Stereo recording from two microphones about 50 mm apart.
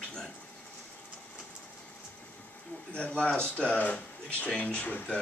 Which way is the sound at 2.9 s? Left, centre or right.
Left.